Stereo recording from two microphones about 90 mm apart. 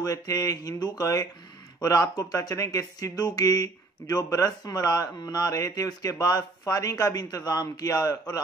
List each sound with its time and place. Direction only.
0.0 s speech: 45° left (ahead or behind)